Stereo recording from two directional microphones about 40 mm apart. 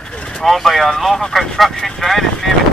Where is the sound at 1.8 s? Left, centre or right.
Centre.